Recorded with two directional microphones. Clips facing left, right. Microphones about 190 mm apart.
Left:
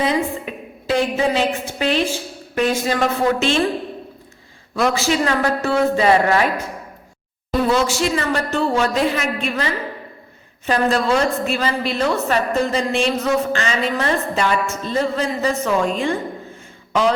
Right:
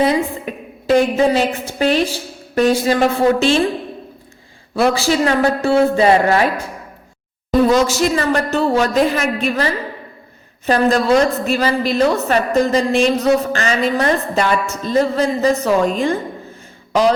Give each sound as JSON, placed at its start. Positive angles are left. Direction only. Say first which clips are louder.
{"t": 0.0, "sound": "a woman's voice", "louder": "right 4 dB", "side_deg": -40}
{"t": 4.7, "sound": "a woman's voice", "louder": "right 3 dB", "side_deg": -30}
{"t": 7.7, "sound": "a woman's voice", "louder": "right 4 dB", "side_deg": -40}
{"t": 10.7, "sound": "a woman's voice", "louder": "right 4 dB", "side_deg": -40}